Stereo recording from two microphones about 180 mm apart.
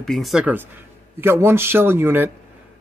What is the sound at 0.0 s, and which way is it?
A man's voice, centre (ahead or behind).